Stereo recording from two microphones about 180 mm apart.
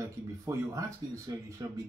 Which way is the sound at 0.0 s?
20° right (ahead or behind).